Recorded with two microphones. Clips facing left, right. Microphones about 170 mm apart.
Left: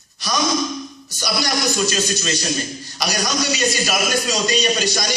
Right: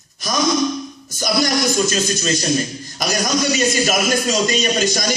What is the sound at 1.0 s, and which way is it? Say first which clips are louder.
Music: right 6 dB; 45° right (ahead or behind).